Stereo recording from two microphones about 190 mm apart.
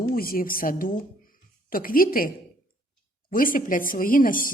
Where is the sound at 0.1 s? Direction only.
50° left (ahead or behind).